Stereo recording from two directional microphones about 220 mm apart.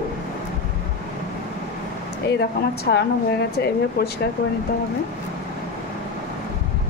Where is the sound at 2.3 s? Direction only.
45° left (ahead or behind).